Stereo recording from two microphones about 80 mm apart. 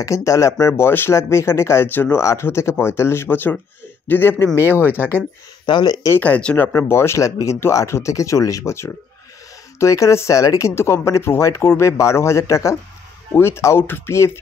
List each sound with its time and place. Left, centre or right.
0.0 s speech: left
2.1 s speech: left
5.7 s speech: left
6.1 s speech: centre; by 10.7 s left
10.7 s speech: left